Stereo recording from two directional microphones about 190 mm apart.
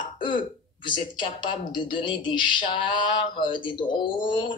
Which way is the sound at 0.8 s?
25° left (ahead or behind).